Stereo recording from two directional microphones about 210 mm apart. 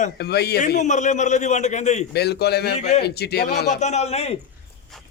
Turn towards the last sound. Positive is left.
turn(degrees=30)  # may be behind; listen again after turning